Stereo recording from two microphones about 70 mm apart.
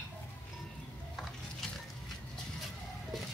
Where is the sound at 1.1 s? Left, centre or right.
Centre.